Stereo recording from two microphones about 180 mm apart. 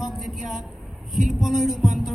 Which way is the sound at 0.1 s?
Centre (ahead or behind).